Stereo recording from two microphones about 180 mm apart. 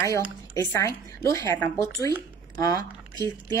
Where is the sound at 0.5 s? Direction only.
15° left (ahead or behind).